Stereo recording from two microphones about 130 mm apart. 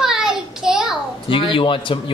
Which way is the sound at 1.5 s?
40° left (ahead or behind).